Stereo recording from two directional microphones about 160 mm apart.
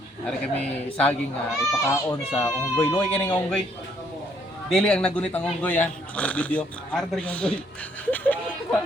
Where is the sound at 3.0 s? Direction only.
10° left (ahead or behind).